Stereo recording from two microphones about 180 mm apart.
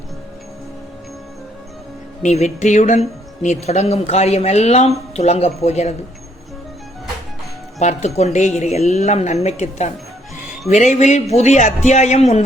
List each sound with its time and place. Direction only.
2.2 s speech: 40° left (ahead or behind)
7.8 s speech: 40° left (ahead or behind)